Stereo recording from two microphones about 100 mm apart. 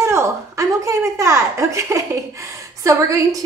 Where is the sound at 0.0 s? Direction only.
25° right (ahead or behind).